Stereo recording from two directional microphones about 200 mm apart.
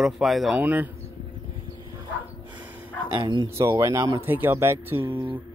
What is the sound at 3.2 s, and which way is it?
Speech, 20° right (ahead or behind).